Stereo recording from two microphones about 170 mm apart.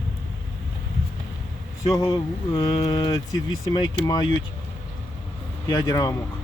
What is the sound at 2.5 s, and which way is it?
Speech, 30° left (ahead or behind).